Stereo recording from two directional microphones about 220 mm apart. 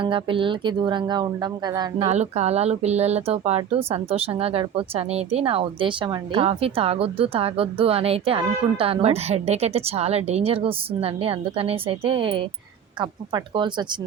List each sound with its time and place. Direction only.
0.0 s speech: 25° right (ahead or behind)
2.0 s speech: 30° right (ahead or behind)